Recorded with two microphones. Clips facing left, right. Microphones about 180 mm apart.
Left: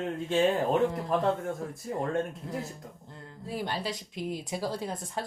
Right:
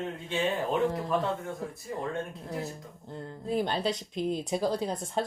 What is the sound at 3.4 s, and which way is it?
Speech, 20° right (ahead or behind).